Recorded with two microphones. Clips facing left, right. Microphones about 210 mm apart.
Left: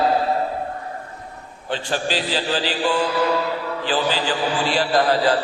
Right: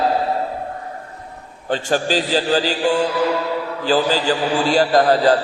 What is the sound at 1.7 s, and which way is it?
A man's voice, 45° right (ahead or behind).